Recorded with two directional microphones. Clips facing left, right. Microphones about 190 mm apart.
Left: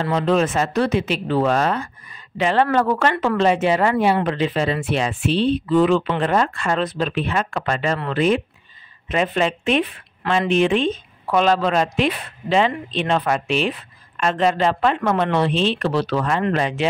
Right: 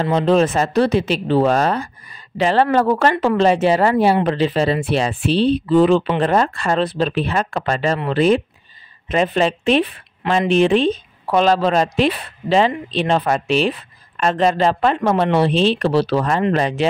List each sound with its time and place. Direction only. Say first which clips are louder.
0.0 s a woman's voice: right 3 dB; 30° right (ahead or behind)